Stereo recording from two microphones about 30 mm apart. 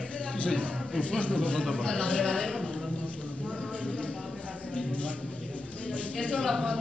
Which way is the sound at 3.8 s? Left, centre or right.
Left.